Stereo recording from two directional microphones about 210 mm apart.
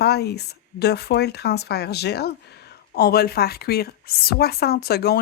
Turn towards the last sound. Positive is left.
turn(degrees=50)  # may be behind; listen again after turning